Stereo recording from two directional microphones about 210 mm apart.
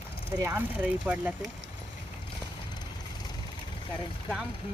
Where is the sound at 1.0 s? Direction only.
5° right (ahead or behind).